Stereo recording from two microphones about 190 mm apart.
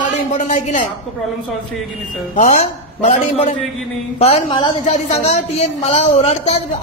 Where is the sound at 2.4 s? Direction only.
40° left (ahead or behind).